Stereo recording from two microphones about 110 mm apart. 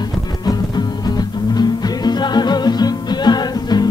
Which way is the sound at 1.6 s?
40° left (ahead or behind).